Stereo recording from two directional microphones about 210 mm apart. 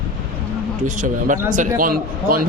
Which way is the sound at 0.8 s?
35° right (ahead or behind).